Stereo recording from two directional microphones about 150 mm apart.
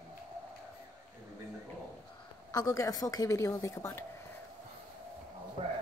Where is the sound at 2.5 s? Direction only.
25° left (ahead or behind).